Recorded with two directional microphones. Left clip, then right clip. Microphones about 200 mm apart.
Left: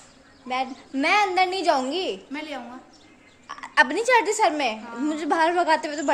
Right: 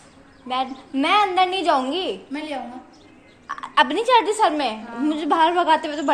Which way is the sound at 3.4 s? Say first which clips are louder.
Right 2 dB; 15° left (ahead or behind).